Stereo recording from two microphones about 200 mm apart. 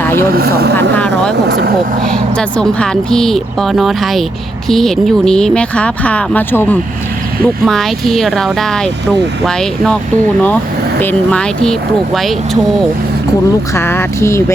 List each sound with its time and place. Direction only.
0.0 s vehicle: 10° left (ahead or behind)
0.3 s speech: 50° right (ahead or behind)
0.8 s speech: 5° left (ahead or behind)
1.5 s speech: 50° right (ahead or behind)
2.6 s speech: 5° left (ahead or behind)
11.0 s speech: 5° left (ahead or behind)
13.7 s speech: 10° left (ahead or behind)